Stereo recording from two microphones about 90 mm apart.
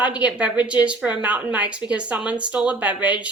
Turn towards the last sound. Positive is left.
turn(degrees=-15)  # may be behind; listen again after turning